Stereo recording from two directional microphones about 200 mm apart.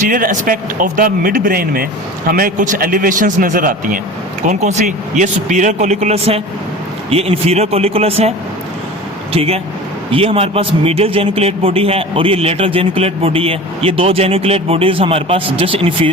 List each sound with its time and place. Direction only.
0.1 s a man's voice: 45° right (ahead or behind)
9.3 s a man's voice: 30° right (ahead or behind)